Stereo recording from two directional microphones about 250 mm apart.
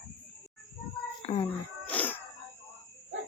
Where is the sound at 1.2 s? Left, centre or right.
Left.